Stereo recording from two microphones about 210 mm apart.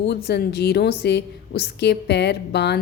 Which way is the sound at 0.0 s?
50° left (ahead or behind).